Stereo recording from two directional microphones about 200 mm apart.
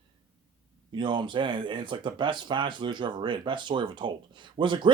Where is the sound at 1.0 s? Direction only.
25° right (ahead or behind).